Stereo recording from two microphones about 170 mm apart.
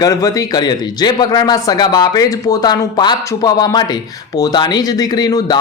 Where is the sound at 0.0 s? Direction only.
20° left (ahead or behind).